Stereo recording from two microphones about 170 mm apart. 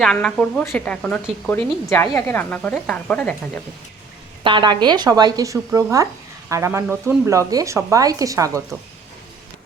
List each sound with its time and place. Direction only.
0.0 s a woman's voice: 5° left (ahead or behind)
4.4 s speech: 30° right (ahead or behind)